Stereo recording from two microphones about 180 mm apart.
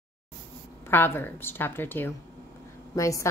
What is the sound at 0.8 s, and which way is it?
A woman's voice, 10° left (ahead or behind).